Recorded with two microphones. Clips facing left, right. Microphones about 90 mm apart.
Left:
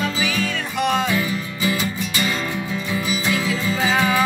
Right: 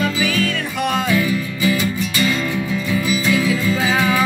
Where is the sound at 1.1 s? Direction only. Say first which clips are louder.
Right 4 dB; 30° left (ahead or behind).